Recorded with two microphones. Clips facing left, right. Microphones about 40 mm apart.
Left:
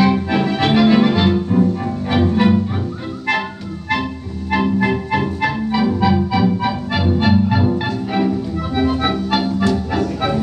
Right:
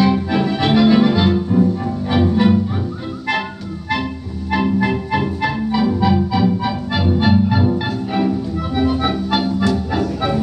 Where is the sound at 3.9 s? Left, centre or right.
Left.